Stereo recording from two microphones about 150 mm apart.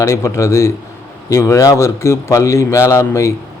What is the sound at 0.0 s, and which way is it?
Speech, 20° left (ahead or behind).